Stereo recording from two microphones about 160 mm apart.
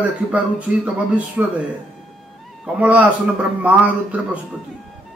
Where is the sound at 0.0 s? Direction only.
10° right (ahead or behind).